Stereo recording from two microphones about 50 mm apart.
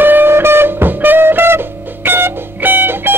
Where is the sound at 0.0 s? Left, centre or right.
Right.